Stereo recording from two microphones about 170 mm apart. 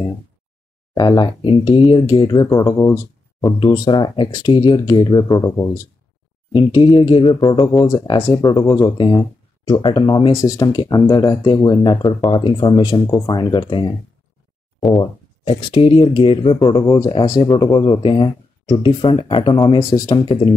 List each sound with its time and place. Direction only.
0.9 s speech: 25° left (ahead or behind)
6.5 s speech: 30° left (ahead or behind)